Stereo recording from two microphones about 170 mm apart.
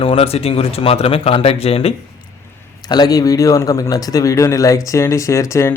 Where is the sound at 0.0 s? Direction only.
35° left (ahead or behind).